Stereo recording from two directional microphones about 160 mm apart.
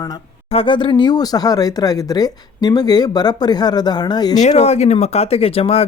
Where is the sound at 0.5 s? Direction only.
35° left (ahead or behind).